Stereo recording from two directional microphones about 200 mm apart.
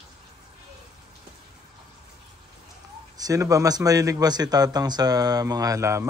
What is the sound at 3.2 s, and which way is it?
Speech, 15° right (ahead or behind).